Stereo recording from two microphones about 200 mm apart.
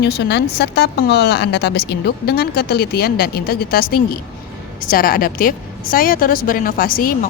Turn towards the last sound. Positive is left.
turn(degrees=45)  # may be behind; listen again after turning